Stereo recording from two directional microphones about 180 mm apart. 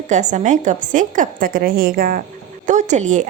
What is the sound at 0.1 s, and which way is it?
A woman's voice, 40° right (ahead or behind).